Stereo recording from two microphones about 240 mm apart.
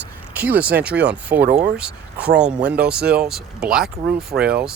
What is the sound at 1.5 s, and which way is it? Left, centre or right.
Speech, right.